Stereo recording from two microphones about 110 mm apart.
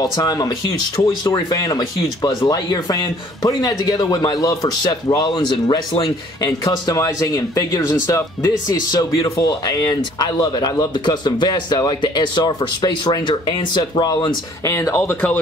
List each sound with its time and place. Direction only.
0.0 s a man's voice: 35° left (ahead or behind)
9.5 s a man's voice: 40° left (ahead or behind); by 15.3 s 20° left (ahead or behind)